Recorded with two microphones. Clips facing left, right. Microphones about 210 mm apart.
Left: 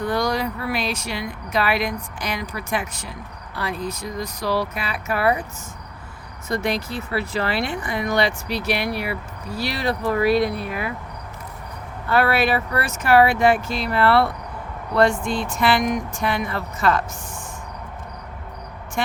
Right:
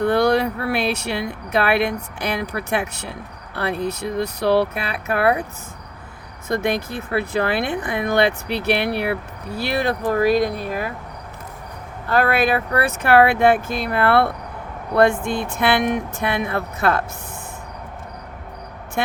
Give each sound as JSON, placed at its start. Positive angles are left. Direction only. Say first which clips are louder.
{"t": 0.0, "sound": "speech", "louder": "right 6 dB", "side_deg": -65}
{"t": 6.5, "sound": "speech", "louder": "right 2 dB", "side_deg": -55}
{"t": 10.1, "sound": "speech", "louder": "right 1 dB", "side_deg": -45}
{"t": 12.0, "sound": "speech", "louder": "right 1 dB", "side_deg": -45}